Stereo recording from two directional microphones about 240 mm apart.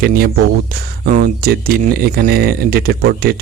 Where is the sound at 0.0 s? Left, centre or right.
Right.